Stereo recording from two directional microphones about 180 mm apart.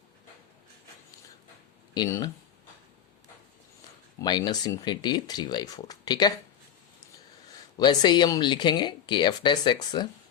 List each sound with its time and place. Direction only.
1.9 s speech: 20° left (ahead or behind)
4.2 s speech: 25° left (ahead or behind)
7.8 s speech: 25° left (ahead or behind)